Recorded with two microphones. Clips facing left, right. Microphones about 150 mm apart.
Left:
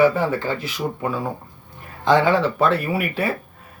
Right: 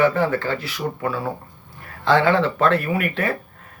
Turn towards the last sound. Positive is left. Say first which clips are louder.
# even
turn(degrees=10)  # may be behind; listen again after turning